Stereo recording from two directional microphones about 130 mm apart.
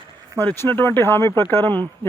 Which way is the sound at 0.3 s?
15° left (ahead or behind).